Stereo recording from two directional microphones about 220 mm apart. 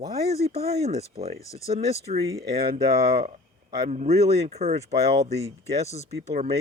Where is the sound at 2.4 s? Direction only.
45° right (ahead or behind).